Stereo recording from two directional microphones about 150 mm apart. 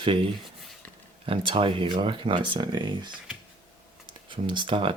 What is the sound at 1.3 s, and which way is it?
Speech, 35° right (ahead or behind).